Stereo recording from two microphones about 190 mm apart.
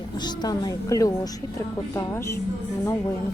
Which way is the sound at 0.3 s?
20° left (ahead or behind).